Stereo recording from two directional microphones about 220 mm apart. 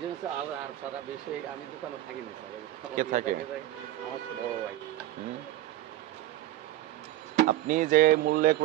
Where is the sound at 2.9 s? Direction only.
35° right (ahead or behind).